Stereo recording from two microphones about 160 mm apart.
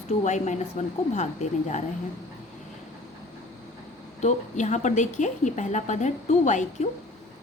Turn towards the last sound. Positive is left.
turn(degrees=50)  # may be behind; listen again after turning